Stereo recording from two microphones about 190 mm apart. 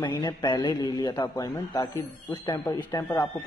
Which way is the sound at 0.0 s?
20° left (ahead or behind).